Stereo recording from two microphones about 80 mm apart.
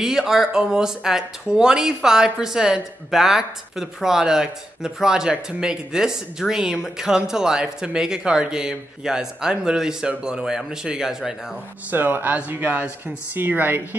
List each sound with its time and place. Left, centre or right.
0.0 s speech: centre
11.9 s speech: right